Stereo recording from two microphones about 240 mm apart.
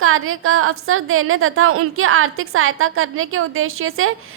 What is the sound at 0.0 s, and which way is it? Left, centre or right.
A woman's voice, right.